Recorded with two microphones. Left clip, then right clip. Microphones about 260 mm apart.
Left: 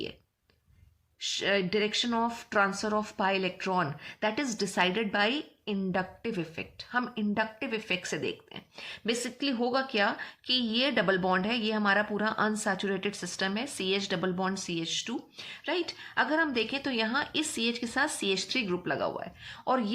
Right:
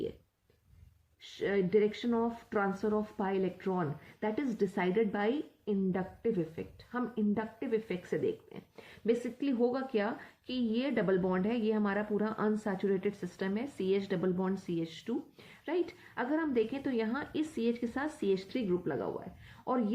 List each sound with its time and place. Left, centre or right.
1.2 s speech: centre